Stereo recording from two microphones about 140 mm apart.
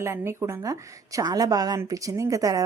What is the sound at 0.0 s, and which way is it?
Speech, 20° right (ahead or behind).